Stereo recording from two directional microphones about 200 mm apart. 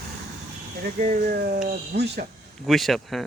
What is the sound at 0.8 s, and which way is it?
Speech, 40° right (ahead or behind).